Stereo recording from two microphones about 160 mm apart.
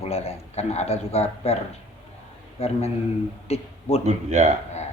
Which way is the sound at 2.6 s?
40° left (ahead or behind).